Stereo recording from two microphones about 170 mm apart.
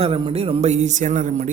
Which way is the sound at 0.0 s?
35° right (ahead or behind).